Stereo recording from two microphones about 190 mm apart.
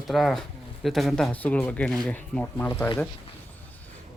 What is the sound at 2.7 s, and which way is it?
Speech, 20° left (ahead or behind).